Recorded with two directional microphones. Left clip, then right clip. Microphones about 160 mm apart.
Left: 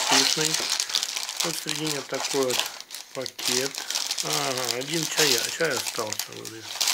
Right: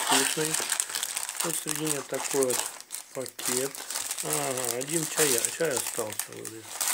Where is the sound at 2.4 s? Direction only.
10° right (ahead or behind).